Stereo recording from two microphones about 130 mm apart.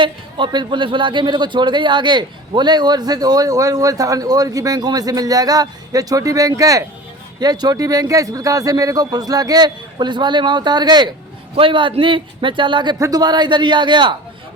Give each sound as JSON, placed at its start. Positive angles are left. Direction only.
{"t": 0.0, "sound": "a man's voice", "side_deg": -40}